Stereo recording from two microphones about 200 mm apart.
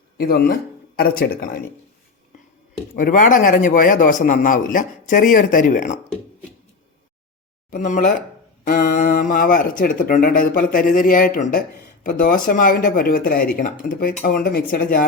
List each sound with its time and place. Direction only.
0.2 s speech: 50° left (ahead or behind)
2.9 s a man's voice: 40° left (ahead or behind)
7.7 s a man's voice: 40° left (ahead or behind)